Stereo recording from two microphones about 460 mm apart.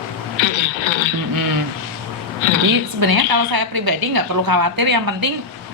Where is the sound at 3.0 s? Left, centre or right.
Right.